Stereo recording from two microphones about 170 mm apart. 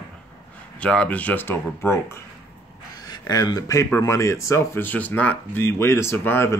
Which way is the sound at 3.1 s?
25° left (ahead or behind).